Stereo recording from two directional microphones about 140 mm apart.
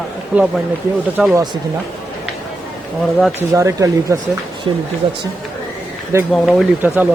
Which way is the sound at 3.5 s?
20° right (ahead or behind).